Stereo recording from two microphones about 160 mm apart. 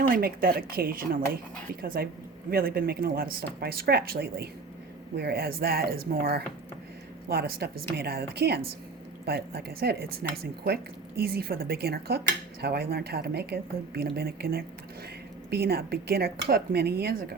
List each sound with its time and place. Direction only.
0.1 s speech: 70° right (ahead or behind)
5.1 s speech: 90° right
9.2 s speech: 80° right